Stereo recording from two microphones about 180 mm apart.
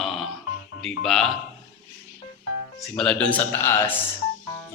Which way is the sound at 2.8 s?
5° left (ahead or behind).